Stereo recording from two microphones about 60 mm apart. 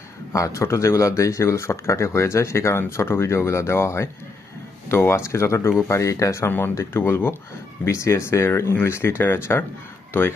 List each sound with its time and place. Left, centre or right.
0.3 s speech: left
6.9 s speech: left
7.9 s speech: left